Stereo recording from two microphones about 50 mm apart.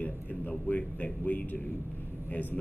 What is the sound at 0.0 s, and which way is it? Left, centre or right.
A man's voice, left.